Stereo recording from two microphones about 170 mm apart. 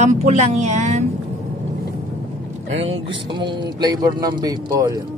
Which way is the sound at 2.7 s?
35° right (ahead or behind).